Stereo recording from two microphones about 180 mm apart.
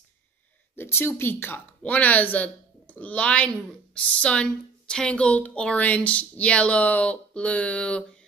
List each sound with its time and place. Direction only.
0.7 s speech: 10° left (ahead or behind)